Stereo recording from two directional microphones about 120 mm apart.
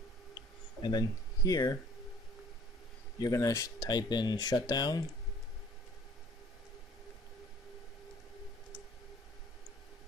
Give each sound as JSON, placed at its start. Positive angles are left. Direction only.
{"t": 0.8, "sound": "speech", "side_deg": 30}
{"t": 3.2, "sound": "speech", "side_deg": 30}